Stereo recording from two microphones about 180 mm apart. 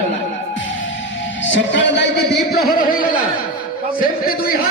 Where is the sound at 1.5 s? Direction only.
85° left.